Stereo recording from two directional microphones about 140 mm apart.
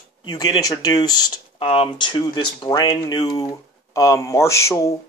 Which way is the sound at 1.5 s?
40° left (ahead or behind).